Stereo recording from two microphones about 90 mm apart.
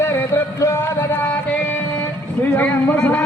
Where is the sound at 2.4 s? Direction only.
20° left (ahead or behind).